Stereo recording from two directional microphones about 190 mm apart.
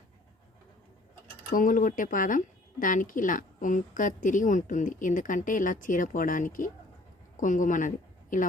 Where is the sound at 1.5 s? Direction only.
45° left (ahead or behind).